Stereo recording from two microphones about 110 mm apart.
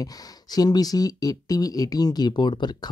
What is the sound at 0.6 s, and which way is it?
Speech, 35° left (ahead or behind).